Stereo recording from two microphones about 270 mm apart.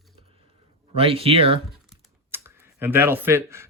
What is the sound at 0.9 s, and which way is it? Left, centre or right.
Speech, right.